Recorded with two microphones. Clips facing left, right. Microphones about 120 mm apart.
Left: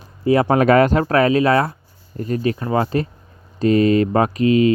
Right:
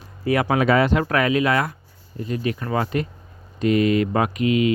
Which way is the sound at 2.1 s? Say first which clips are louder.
Left 4 dB; 45° left (ahead or behind).